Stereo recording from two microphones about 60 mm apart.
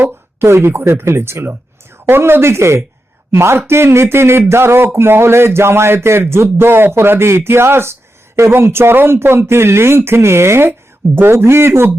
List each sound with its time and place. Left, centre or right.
0.0 s speech: right